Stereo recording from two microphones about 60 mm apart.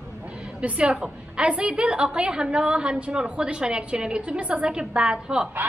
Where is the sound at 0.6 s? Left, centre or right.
Right.